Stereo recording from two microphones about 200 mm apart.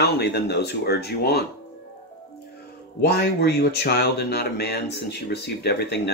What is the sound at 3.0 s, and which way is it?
Speech, 55° left (ahead or behind).